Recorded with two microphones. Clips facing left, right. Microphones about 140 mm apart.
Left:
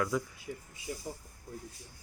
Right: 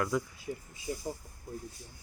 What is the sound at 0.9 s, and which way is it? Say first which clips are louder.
Speech: right 3 dB; 30° right (ahead or behind).